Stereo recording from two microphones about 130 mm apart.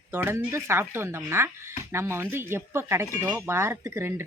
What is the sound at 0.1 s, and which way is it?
Speech, 15° right (ahead or behind).